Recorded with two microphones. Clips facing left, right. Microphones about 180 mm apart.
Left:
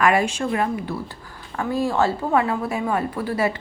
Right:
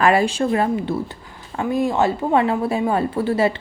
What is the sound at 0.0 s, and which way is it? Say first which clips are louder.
A woman's voice: right 3 dB; 30° right (ahead or behind).